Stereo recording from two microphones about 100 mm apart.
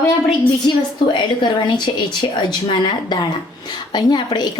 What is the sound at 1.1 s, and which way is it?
A woman's voice, 50° left (ahead or behind).